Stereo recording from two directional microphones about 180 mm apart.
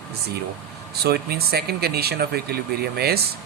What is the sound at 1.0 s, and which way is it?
Speech, 60° right (ahead or behind).